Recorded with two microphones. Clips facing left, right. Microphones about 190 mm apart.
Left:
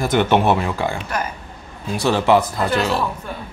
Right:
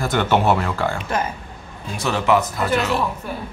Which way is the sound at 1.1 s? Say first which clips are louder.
Right 4 dB; 25° right (ahead or behind).